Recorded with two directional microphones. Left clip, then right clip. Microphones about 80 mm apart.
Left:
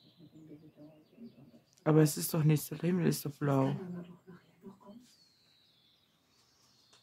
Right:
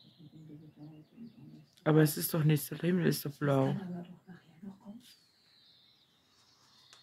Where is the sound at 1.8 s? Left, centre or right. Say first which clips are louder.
Even; left.